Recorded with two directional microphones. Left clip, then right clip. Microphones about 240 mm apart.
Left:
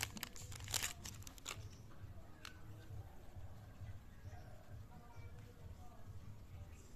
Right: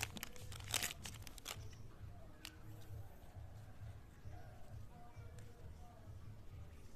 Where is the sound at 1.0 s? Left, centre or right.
Right.